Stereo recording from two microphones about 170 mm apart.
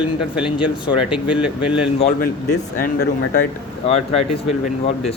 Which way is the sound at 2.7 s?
55° left (ahead or behind).